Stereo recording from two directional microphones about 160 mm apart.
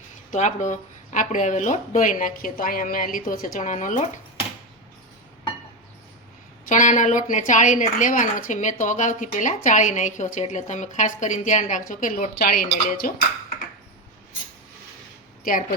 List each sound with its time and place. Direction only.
0.3 s a woman's voice: 50° left (ahead or behind)
6.7 s a woman's voice: 50° left (ahead or behind)